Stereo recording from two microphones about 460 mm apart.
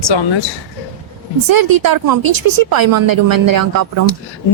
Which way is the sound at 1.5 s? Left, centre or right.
Right.